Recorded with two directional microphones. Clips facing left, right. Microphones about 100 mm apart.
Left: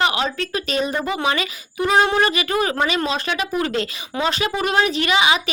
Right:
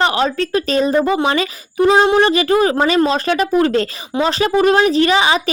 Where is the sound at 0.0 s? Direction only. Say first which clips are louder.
Right 5 dB; 35° right (ahead or behind).